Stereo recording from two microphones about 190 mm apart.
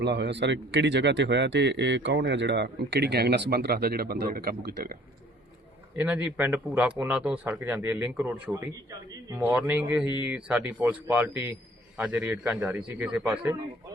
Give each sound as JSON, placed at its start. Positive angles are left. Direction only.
{"t": 0.0, "sound": "speech", "side_deg": -65}
{"t": 6.0, "sound": "speech", "side_deg": -10}